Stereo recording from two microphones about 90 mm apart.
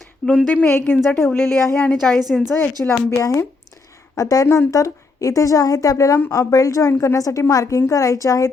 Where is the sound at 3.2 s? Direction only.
35° left (ahead or behind).